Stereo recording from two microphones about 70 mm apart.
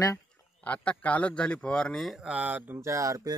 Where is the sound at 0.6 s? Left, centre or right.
Centre.